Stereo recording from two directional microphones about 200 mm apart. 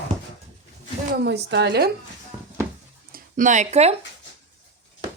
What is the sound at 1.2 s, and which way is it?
Speech, 60° right (ahead or behind).